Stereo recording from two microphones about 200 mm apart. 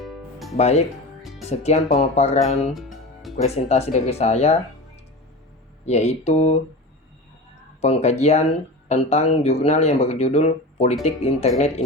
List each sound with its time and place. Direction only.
0.0 s music: centre (ahead or behind)
0.5 s speech: 35° left (ahead or behind)
1.2 s music: centre (ahead or behind)
1.5 s speech: 35° left (ahead or behind)
2.7 s music: centre (ahead or behind)
3.3 s speech: 35° left (ahead or behind)
5.8 s speech: 35° left (ahead or behind)
7.8 s speech: 30° left (ahead or behind)